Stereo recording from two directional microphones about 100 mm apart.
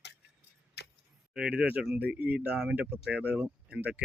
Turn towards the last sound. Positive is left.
turn(degrees=-15)  # may be behind; listen again after turning